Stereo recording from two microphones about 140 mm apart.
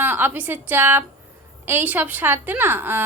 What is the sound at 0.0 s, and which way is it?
A woman's voice, 15° right (ahead or behind).